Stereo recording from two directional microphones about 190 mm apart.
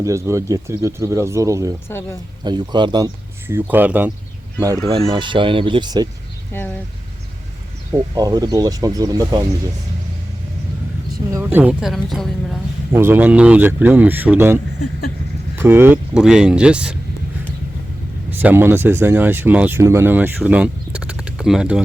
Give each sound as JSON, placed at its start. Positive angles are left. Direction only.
{"t": 0.0, "sound": "speech", "side_deg": -15}
{"t": 3.4, "sound": "speech", "side_deg": -10}
{"t": 4.9, "sound": "speech", "side_deg": -30}
{"t": 7.9, "sound": "speech", "side_deg": -20}
{"t": 11.4, "sound": "speech", "side_deg": -5}
{"t": 12.9, "sound": "speech", "side_deg": -10}
{"t": 18.3, "sound": "speech", "side_deg": -10}